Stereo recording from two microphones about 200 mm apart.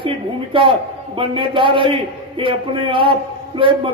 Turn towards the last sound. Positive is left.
turn(degrees=-25)  # may be behind; listen again after turning